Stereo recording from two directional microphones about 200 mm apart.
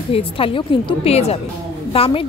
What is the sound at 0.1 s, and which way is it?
A woman's voice, 25° left (ahead or behind).